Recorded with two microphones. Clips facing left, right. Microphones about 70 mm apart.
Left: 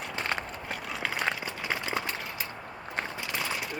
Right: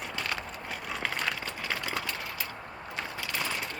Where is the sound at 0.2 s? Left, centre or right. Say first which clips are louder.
Left 3 dB; left.